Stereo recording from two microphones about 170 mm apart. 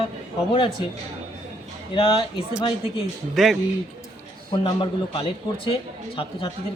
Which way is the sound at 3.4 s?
Centre (ahead or behind).